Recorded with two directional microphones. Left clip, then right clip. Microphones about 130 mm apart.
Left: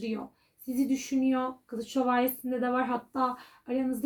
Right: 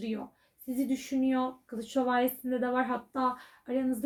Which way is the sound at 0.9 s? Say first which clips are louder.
Left 1 dB; 25° left (ahead or behind).